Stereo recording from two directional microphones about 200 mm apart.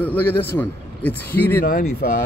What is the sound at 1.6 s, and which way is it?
Speech, 45° left (ahead or behind).